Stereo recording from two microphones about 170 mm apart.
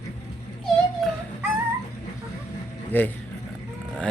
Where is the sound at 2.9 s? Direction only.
10° left (ahead or behind).